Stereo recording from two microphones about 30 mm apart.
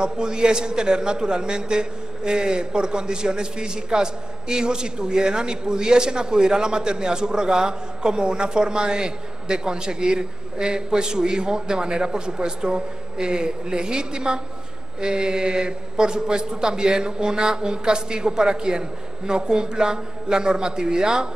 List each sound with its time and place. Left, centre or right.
0.0 s a man's voice: right